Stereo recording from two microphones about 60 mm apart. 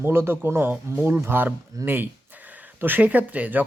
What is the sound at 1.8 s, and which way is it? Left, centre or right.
Speech, right.